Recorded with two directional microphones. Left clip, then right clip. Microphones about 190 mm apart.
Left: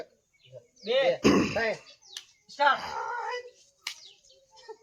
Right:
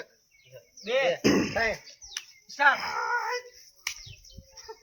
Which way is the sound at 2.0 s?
30° left (ahead or behind).